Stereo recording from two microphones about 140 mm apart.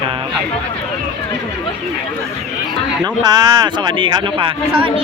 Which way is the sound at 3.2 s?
30° right (ahead or behind).